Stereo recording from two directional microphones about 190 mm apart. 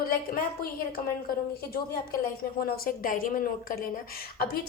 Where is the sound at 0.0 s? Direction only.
50° left (ahead or behind).